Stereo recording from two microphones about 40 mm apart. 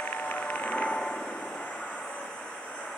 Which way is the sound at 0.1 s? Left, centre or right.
Left.